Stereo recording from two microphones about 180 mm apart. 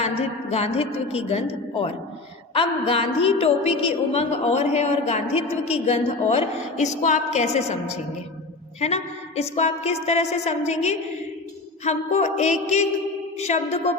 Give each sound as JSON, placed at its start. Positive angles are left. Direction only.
{"t": 0.0, "sound": "a woman's voice", "side_deg": 35}
{"t": 8.8, "sound": "a woman's voice", "side_deg": 35}